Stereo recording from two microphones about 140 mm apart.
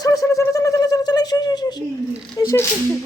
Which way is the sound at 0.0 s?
25° left (ahead or behind).